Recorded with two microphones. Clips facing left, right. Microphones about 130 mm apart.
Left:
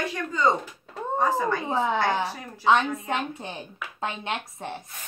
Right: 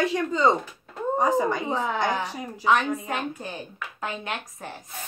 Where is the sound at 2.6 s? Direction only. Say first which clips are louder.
Left 1 dB; 25° left (ahead or behind).